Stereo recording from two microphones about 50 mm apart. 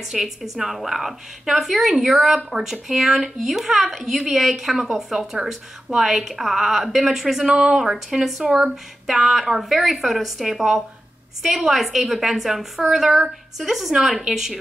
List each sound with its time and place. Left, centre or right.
0.0 s speech: centre
7.4 s speech: centre
7.7 s speech: centre